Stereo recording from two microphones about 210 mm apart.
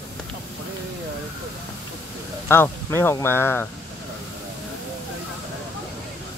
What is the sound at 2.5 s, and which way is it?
Speech, 10° left (ahead or behind).